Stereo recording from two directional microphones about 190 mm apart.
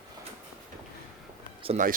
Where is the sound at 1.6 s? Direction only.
40° right (ahead or behind).